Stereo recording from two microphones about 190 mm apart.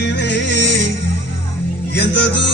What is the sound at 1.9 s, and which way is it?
Music, 70° left (ahead or behind).